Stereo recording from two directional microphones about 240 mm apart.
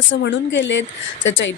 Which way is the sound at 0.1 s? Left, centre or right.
Left.